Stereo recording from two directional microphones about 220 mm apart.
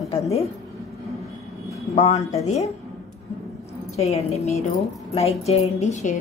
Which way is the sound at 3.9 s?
30° left (ahead or behind).